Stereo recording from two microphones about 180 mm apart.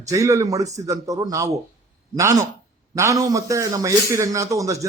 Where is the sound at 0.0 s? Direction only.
20° right (ahead or behind).